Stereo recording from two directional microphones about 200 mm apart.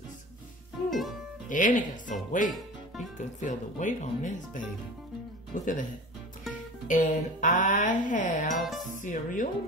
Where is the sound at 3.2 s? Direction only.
40° left (ahead or behind).